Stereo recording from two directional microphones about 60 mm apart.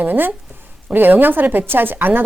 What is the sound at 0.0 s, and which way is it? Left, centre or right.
A woman's voice, right.